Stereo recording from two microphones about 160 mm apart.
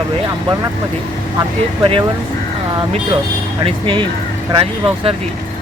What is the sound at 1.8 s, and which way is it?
Speech, 30° right (ahead or behind).